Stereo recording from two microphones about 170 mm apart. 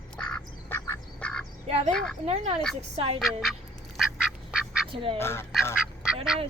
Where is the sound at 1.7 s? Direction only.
35° right (ahead or behind).